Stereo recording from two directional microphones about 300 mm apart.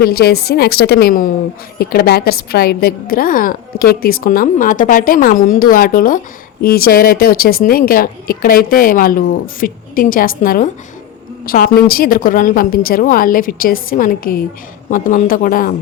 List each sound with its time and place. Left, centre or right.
0.0 s a woman's voice: left